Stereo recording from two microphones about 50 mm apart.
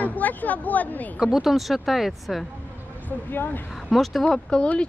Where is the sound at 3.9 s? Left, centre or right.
Centre.